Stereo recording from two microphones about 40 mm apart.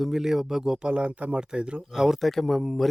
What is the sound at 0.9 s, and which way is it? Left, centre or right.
Speech, right.